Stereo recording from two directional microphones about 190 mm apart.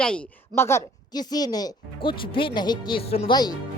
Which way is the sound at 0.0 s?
10° left (ahead or behind).